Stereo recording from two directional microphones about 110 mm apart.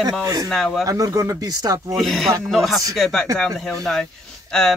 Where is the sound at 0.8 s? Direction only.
30° right (ahead or behind).